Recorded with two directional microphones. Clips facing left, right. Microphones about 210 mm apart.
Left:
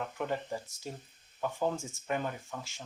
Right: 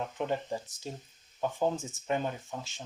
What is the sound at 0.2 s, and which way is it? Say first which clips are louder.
Speech: right 2 dB; 20° right (ahead or behind).